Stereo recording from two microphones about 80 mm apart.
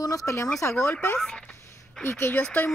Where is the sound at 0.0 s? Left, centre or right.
Left.